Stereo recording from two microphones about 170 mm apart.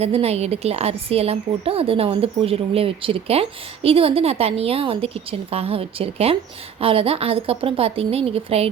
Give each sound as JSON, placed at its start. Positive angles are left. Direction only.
{"t": 0.0, "sound": "a woman's voice", "side_deg": -35}